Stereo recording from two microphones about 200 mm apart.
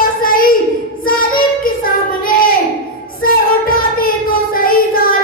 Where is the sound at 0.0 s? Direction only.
45° left (ahead or behind).